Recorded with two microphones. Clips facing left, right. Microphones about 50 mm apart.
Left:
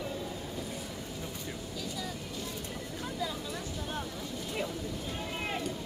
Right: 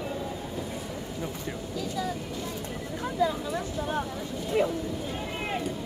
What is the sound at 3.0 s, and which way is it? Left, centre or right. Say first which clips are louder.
Vehicle: right 10 dB; right.